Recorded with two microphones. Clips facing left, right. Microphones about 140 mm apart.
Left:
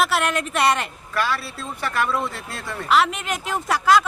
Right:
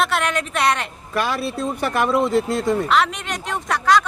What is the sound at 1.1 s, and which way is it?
Speech, 20° right (ahead or behind).